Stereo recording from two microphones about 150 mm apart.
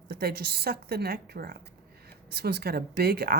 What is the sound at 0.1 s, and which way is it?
A woman's voice, 90° right.